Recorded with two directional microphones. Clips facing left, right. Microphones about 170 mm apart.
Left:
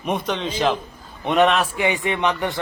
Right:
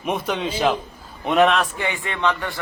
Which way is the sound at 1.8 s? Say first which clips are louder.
Left 3 dB; 15° left (ahead or behind).